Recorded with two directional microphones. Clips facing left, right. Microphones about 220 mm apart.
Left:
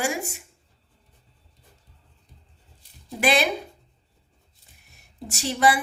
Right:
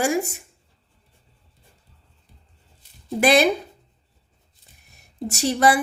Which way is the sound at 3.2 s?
40° right (ahead or behind).